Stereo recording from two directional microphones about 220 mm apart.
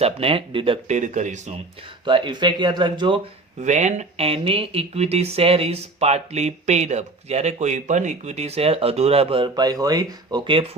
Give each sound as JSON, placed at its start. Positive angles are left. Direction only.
{"t": 0.0, "sound": "speech", "side_deg": -25}
{"t": 2.0, "sound": "speech", "side_deg": -20}
{"t": 3.6, "sound": "speech", "side_deg": -30}